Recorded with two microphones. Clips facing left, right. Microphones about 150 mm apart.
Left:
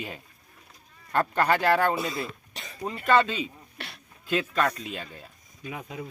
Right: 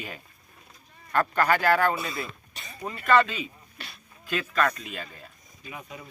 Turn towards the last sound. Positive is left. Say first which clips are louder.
# left 3 dB
turn(degrees=90)